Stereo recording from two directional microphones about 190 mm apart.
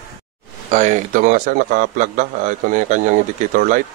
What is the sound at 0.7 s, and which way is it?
A man's voice, 40° right (ahead or behind).